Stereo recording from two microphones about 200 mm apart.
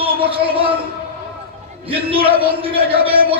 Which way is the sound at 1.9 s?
25° right (ahead or behind).